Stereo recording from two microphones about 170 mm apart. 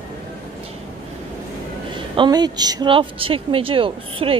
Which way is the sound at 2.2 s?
25° right (ahead or behind).